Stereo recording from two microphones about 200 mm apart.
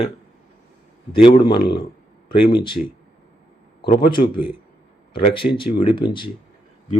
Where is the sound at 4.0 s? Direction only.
25° left (ahead or behind).